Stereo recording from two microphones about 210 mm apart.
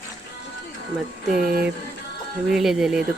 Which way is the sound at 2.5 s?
Centre (ahead or behind).